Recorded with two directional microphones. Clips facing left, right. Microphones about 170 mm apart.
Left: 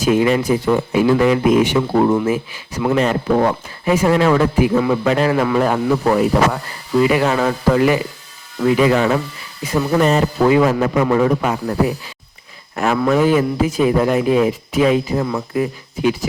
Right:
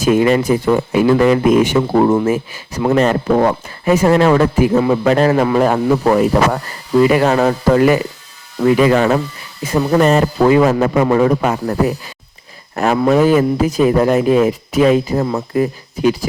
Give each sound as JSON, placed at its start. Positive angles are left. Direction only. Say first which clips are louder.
{"t": 0.0, "sound": "a man's voice", "louder": "right 2 dB", "side_deg": -50}
{"t": 12.7, "sound": "a man's voice", "louder": "right 3 dB", "side_deg": -35}